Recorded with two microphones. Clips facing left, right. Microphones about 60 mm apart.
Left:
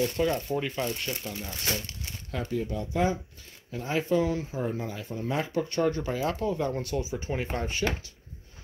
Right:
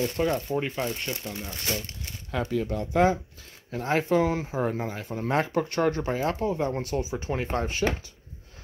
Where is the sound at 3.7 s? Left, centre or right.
Right.